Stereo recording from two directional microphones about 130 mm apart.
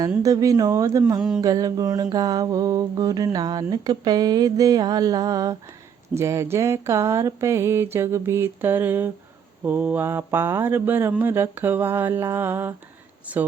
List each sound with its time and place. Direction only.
0.2 s mantra: 25° right (ahead or behind)
9.6 s speech: 15° right (ahead or behind)